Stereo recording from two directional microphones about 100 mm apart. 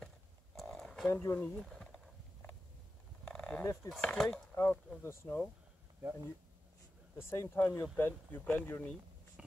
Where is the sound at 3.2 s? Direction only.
10° left (ahead or behind).